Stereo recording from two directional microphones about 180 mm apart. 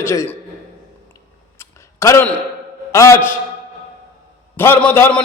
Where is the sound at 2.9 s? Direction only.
15° left (ahead or behind).